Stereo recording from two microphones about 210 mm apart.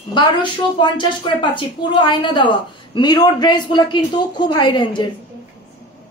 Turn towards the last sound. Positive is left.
turn(degrees=20)  # may be behind; listen again after turning